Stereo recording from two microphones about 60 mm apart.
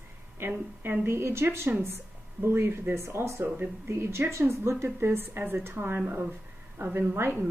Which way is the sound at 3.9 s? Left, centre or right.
Right.